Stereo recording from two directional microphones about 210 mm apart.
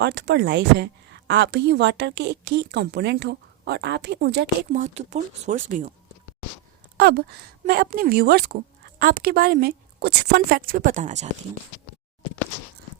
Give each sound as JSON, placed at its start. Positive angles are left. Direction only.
{"t": 0.0, "sound": "speech", "side_deg": -55}
{"t": 4.7, "sound": "speech", "side_deg": -35}
{"t": 6.9, "sound": "speech", "side_deg": -50}